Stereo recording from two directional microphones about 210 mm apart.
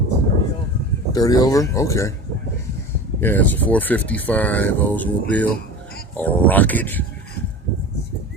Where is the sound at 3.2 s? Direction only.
10° left (ahead or behind).